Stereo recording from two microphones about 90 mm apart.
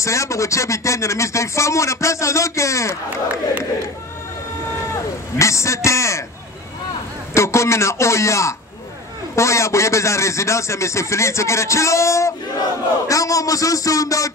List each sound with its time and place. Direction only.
0.0 s a man's voice: 35° left (ahead or behind)
4.9 s a sound: 35° left (ahead or behind)
7.3 s a man's voice: 30° left (ahead or behind)